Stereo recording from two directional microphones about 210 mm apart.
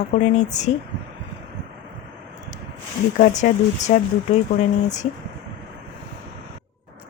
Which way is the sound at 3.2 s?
35° left (ahead or behind).